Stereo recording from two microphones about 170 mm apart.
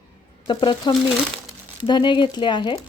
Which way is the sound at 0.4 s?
25° left (ahead or behind).